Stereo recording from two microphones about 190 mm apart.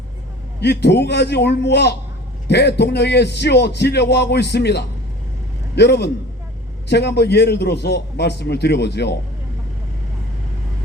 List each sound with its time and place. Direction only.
0.6 s a man's voice: 60° left (ahead or behind)